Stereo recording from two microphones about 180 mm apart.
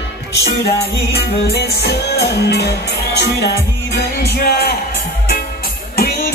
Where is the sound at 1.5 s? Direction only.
65° left (ahead or behind).